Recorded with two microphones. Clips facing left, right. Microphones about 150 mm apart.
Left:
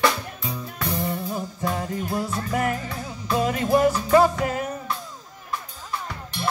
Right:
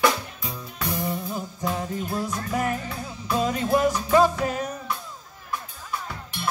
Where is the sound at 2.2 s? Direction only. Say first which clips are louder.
Left 2 dB; 20° right (ahead or behind).